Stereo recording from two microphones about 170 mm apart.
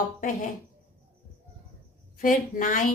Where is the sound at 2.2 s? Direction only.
50° left (ahead or behind).